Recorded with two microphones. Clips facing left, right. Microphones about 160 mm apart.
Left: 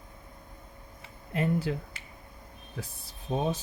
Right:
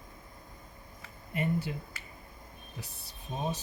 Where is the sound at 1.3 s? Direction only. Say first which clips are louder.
Left 4 dB; 90° left.